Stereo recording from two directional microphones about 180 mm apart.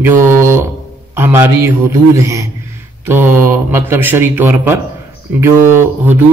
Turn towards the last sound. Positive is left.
turn(degrees=-10)  # may be behind; listen again after turning